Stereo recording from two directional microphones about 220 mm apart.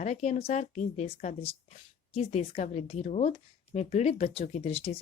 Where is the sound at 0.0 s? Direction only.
30° left (ahead or behind).